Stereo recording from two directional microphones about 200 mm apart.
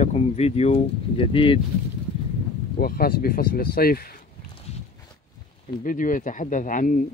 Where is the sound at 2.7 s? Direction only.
50° left (ahead or behind).